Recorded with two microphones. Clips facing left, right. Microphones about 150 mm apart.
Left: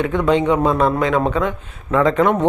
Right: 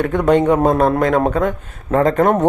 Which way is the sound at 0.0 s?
50° right (ahead or behind).